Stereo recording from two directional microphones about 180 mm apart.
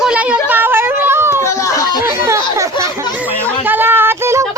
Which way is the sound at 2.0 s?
15° right (ahead or behind).